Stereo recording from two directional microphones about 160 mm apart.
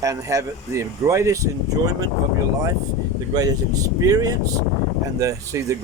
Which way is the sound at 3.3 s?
20° right (ahead or behind).